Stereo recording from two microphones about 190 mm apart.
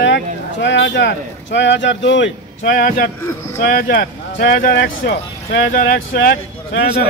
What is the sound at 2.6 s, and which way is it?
A man's voice, 45° left (ahead or behind).